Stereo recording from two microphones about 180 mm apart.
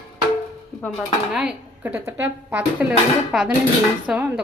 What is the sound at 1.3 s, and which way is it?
A woman's voice, 5° right (ahead or behind).